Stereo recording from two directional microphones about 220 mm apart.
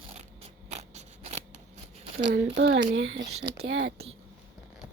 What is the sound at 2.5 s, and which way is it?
Speech, 55° right (ahead or behind).